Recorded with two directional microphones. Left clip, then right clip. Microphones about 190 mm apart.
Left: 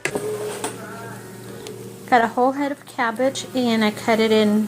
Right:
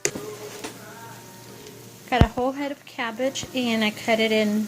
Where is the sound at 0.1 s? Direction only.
Centre (ahead or behind).